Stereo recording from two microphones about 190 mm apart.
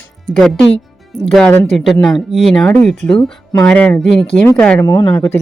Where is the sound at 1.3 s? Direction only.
5° left (ahead or behind).